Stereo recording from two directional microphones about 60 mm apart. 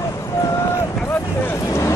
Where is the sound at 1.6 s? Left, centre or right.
Left.